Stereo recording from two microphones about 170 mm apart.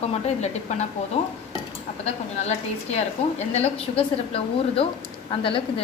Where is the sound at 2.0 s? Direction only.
40° left (ahead or behind).